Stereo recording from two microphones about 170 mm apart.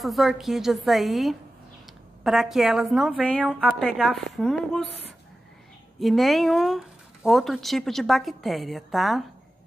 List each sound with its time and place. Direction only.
0.0 s a woman's voice: centre (ahead or behind)
5.9 s a woman's voice: centre (ahead or behind)